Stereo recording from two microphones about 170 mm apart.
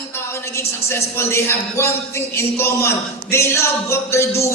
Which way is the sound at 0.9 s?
15° left (ahead or behind).